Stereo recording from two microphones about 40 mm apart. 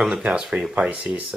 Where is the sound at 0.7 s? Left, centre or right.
Right.